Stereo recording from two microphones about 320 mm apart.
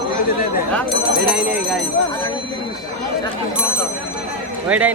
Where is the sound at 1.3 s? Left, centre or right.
Centre.